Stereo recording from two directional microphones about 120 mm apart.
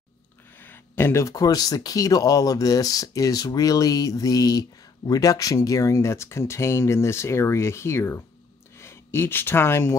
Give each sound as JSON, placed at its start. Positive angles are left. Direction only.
{"t": 0.6, "sound": "speech", "side_deg": 20}